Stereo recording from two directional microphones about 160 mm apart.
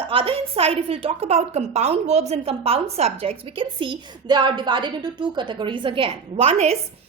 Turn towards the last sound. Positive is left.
turn(degrees=-40)  # may be behind; listen again after turning